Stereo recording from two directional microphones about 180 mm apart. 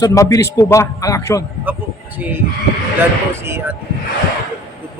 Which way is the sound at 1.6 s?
10° right (ahead or behind).